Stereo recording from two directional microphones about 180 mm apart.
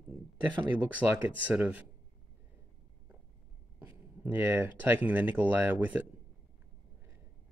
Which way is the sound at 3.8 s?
10° right (ahead or behind).